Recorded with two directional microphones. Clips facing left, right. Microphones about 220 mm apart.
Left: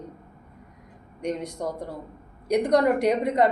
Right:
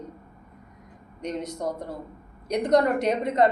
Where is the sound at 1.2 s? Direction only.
10° left (ahead or behind).